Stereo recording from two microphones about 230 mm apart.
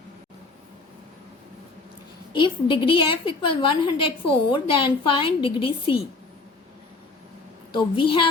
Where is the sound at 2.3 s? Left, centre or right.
Left.